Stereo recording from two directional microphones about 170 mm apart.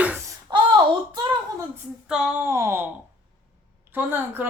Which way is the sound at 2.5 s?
15° right (ahead or behind).